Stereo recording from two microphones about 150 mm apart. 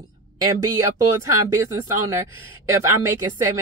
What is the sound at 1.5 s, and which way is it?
Speech, 20° right (ahead or behind).